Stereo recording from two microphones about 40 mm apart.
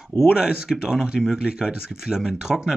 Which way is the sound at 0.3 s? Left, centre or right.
Centre.